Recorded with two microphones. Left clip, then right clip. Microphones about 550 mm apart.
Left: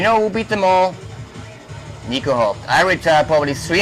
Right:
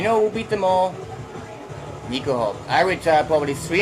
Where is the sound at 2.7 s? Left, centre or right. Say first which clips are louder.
Left 3 dB; left.